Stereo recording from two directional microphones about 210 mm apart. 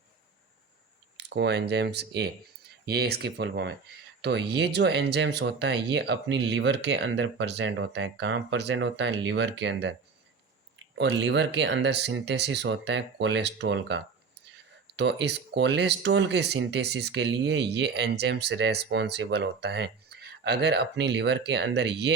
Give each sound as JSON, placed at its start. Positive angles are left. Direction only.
{"t": 1.1, "sound": "speech", "side_deg": -55}
{"t": 10.9, "sound": "speech", "side_deg": -55}